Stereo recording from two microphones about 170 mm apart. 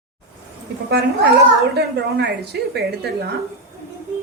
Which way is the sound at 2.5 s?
85° right.